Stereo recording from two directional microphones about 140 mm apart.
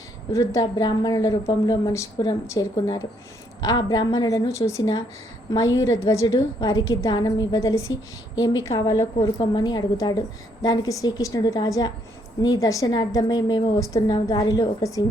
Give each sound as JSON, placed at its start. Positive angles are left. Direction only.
{"t": 0.3, "sound": "a woman's voice", "side_deg": 25}
{"t": 9.4, "sound": "a woman's voice", "side_deg": 30}